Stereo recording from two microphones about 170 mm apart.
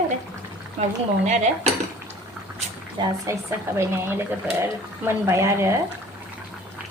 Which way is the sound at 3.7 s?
15° right (ahead or behind).